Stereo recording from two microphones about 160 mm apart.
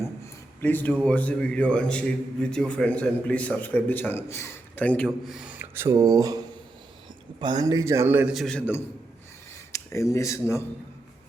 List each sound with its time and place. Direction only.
0.6 s a man's voice: 10° left (ahead or behind)
5.3 s speech: 10° right (ahead or behind)
7.4 s speech: 25° right (ahead or behind)
8.3 s a man's voice: centre (ahead or behind)
9.7 s speech: 20° left (ahead or behind)